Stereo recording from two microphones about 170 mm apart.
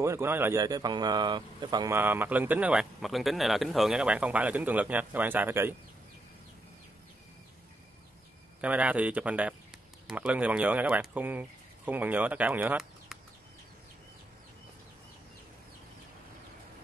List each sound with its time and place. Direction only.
0.0 s a man's voice: 15° right (ahead or behind)
2.0 s a man's voice: 10° right (ahead or behind)
8.5 s speech: 10° right (ahead or behind)